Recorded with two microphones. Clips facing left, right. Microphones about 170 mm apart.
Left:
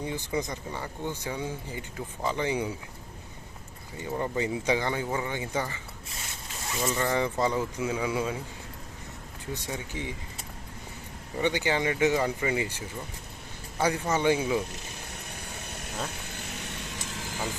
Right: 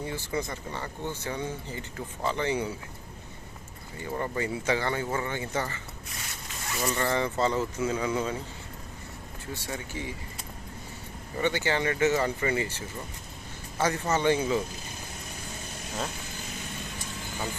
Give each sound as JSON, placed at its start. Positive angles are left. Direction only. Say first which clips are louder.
{"t": 0.0, "sound": "speech", "louder": "left 1 dB", "side_deg": 15}
{"t": 4.1, "sound": "speech", "louder": "left 1 dB", "side_deg": 15}
{"t": 9.5, "sound": "speech", "louder": "left 1 dB", "side_deg": 20}
{"t": 11.3, "sound": "speech", "louder": "left 1 dB", "side_deg": 15}